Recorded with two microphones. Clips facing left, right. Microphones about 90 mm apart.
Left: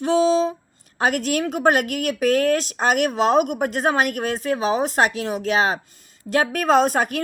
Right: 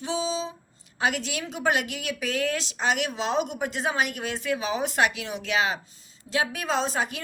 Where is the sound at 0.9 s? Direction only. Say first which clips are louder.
Left 7 dB; 50° left (ahead or behind).